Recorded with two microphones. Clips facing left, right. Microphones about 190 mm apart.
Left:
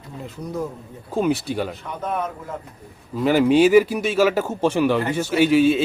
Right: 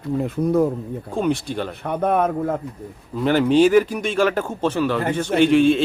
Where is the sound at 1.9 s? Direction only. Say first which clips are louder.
Right 7 dB; 60° right (ahead or behind).